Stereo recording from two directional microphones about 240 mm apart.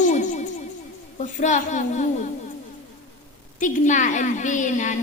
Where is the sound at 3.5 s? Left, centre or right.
Left.